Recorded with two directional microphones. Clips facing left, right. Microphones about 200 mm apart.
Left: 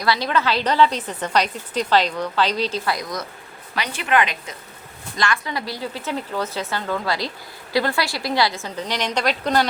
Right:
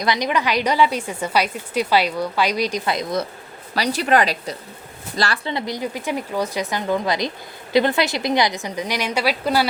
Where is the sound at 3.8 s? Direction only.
35° right (ahead or behind).